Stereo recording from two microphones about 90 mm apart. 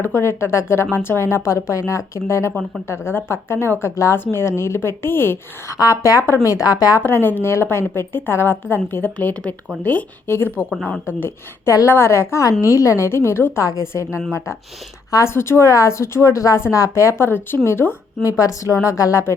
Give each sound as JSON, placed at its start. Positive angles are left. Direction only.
{"t": 0.0, "sound": "a woman's voice", "side_deg": 30}
{"t": 5.7, "sound": "a woman's voice", "side_deg": 40}
{"t": 7.0, "sound": "a woman's voice", "side_deg": 25}
{"t": 15.2, "sound": "a woman's voice", "side_deg": 30}
{"t": 18.2, "sound": "a woman's voice", "side_deg": 40}